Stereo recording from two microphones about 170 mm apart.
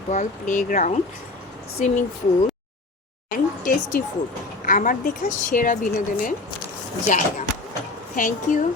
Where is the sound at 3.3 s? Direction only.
55° left (ahead or behind).